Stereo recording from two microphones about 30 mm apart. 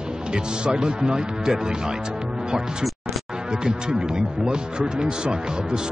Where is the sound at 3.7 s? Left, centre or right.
Right.